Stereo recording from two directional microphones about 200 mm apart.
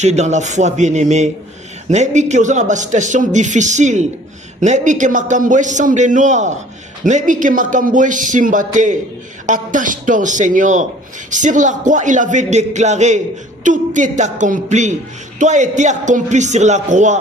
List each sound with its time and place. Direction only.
0.0 s a man's voice: 35° right (ahead or behind)